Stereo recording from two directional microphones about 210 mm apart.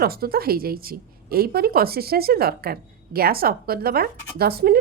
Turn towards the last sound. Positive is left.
turn(degrees=-50)  # may be behind; listen again after turning